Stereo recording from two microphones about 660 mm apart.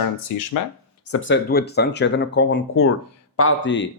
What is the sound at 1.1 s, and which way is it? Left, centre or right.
Speech, centre.